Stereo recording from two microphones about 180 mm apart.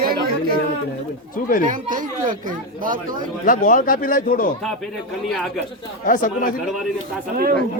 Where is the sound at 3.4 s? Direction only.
50° left (ahead or behind).